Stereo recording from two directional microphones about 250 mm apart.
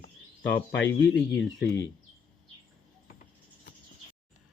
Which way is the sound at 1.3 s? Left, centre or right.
Centre.